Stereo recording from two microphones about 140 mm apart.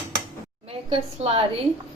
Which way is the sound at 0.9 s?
45° right (ahead or behind).